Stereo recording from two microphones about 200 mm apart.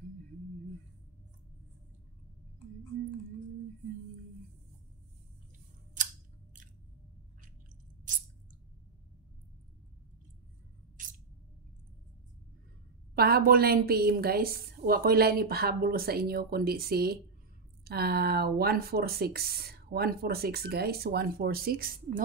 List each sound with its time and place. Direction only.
13.1 s speech: 50° right (ahead or behind)